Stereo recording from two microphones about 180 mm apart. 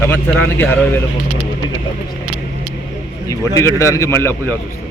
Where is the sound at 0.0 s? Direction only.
10° left (ahead or behind).